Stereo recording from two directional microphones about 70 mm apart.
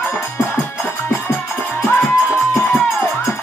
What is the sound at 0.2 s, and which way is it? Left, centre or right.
Music, left.